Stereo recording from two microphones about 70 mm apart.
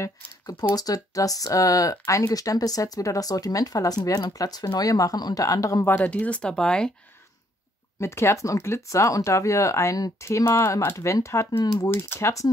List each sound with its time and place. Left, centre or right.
0.7 s speech: left
5.9 s speech: left; by 6.9 s centre
8.0 s speech: left
10.2 s speech: left
11.0 s speech: left
11.9 s speech: left